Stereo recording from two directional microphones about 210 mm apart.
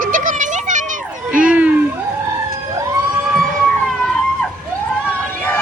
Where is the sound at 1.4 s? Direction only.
5° right (ahead or behind).